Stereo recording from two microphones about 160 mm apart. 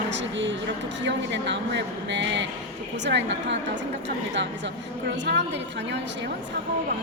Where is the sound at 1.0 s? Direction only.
90° right.